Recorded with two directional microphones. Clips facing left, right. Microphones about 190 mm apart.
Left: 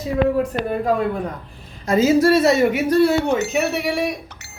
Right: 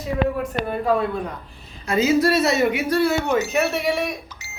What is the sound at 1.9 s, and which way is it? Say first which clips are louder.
Speech: left 4 dB; 45° left (ahead or behind).